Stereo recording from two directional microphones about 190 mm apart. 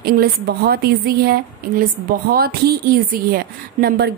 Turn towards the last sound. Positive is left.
turn(degrees=-55)  # may be behind; listen again after turning